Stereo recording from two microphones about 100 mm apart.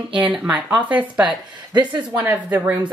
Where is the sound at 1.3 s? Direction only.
45° right (ahead or behind).